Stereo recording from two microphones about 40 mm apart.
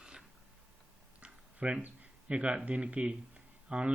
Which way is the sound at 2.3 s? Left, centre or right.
Right.